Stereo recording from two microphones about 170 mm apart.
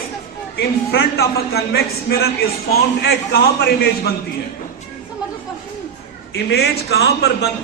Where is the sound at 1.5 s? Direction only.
70° left (ahead or behind).